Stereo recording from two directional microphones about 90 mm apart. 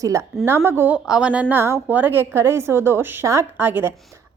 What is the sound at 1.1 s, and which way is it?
A woman's voice, 10° right (ahead or behind).